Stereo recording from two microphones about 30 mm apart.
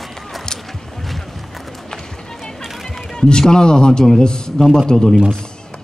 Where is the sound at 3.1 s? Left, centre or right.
Left.